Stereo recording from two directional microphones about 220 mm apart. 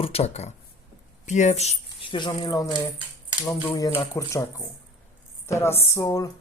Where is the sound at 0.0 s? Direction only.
25° left (ahead or behind).